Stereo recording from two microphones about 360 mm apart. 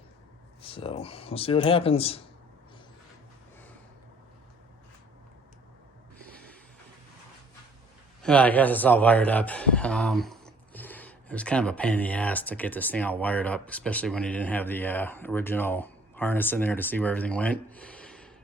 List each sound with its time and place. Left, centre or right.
0.6 s speech: centre
8.2 s speech: centre